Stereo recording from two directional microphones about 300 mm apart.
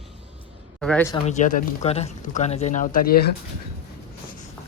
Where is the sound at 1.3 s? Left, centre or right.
Left.